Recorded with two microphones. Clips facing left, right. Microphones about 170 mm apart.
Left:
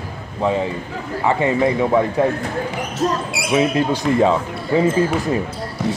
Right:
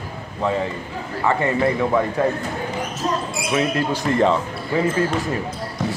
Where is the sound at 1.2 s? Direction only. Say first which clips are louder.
Left 2 dB; 15° left (ahead or behind).